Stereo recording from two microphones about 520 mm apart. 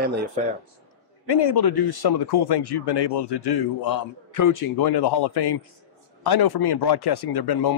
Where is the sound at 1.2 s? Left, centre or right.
Left.